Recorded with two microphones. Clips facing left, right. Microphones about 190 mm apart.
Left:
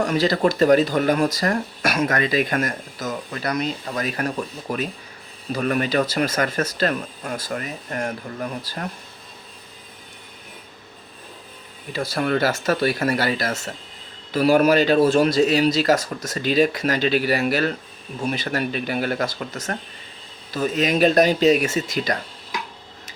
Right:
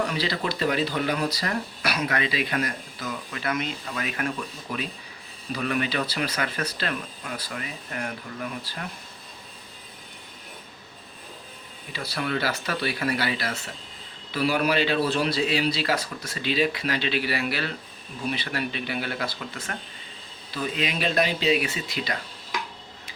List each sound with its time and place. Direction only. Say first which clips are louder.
0.0 s speech: left 8 dB; 45° left (ahead or behind)
11.9 s speech: left 7 dB; 45° left (ahead or behind)